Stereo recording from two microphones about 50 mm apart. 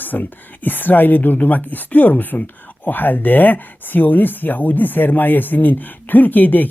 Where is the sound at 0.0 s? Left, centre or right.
Left.